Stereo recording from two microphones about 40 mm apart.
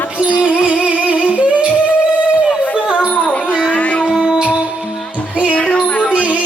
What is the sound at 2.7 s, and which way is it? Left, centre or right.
Music, right.